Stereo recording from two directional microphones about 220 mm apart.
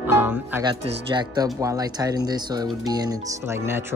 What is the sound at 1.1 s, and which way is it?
Speech, 20° right (ahead or behind).